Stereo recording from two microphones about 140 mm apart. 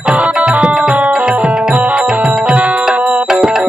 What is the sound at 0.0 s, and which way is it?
Music, 10° right (ahead or behind).